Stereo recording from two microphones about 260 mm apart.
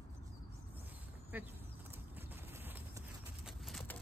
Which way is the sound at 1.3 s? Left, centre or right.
Centre.